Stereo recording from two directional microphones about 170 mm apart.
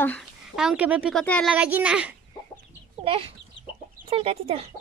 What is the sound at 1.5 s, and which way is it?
Speech, 10° right (ahead or behind).